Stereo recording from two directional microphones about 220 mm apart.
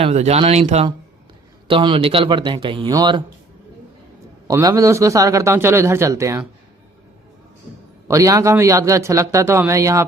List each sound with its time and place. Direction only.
0.0 s speech: 30° right (ahead or behind)
4.4 s a man's voice: 15° right (ahead or behind)
8.0 s a man's voice: 15° right (ahead or behind)